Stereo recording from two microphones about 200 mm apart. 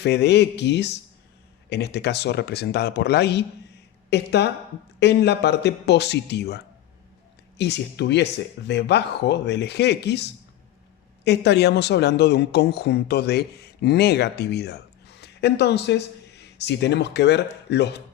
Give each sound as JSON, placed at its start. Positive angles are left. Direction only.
{"t": 0.0, "sound": "speech", "side_deg": 55}
{"t": 7.6, "sound": "speech", "side_deg": 60}